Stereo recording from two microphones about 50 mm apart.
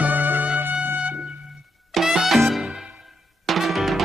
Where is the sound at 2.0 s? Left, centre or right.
Centre.